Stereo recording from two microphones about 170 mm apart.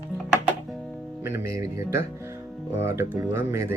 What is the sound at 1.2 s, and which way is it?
Music, 15° right (ahead or behind).